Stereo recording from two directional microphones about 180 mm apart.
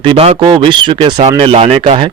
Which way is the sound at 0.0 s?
30° right (ahead or behind).